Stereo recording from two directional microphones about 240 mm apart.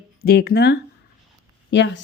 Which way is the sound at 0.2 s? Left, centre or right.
Left.